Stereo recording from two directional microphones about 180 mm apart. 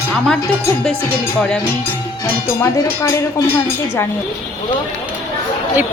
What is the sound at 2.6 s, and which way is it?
Speech, 15° left (ahead or behind).